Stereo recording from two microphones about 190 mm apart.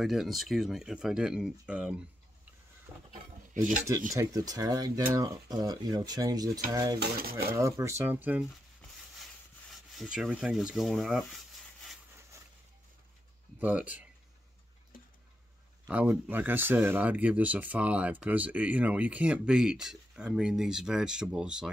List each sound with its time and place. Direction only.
0.0 s speech: centre (ahead or behind)
4.1 s speech: 15° right (ahead or behind)
7.0 s speech: 50° right (ahead or behind)
7.5 s speech: 15° right (ahead or behind)
9.9 s speech: centre (ahead or behind)
12.2 s a sound: 15° right (ahead or behind)
13.6 s speech: 10° right (ahead or behind)
15.9 s speech: 10° right (ahead or behind)